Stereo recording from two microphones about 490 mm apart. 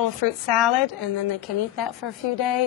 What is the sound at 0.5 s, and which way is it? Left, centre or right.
Speech, centre.